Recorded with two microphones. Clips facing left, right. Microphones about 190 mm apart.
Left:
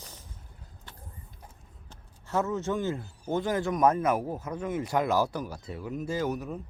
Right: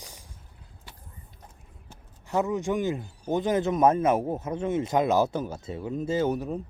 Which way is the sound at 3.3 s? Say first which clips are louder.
Right 3 dB; 20° right (ahead or behind).